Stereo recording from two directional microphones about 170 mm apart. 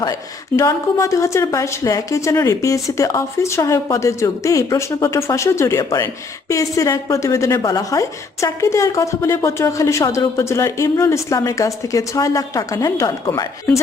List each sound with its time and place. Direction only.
0.0 s a woman's voice: 20° left (ahead or behind)